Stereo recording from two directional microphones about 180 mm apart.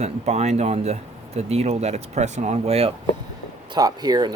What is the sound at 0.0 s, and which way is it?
Speech, 35° right (ahead or behind).